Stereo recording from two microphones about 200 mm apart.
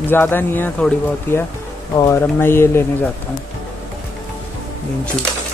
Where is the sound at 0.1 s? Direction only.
10° left (ahead or behind).